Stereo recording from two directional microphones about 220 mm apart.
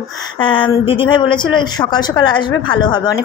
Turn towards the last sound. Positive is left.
turn(degrees=20)  # may be behind; listen again after turning